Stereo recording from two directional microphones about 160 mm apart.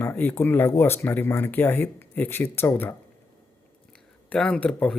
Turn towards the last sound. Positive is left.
turn(degrees=5)  # may be behind; listen again after turning